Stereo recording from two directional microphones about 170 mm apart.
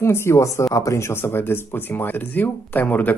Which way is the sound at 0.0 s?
15° left (ahead or behind).